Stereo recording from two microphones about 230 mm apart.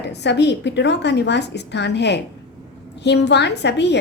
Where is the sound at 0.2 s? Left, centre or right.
Left.